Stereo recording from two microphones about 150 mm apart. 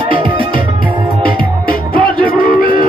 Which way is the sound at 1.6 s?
80° left.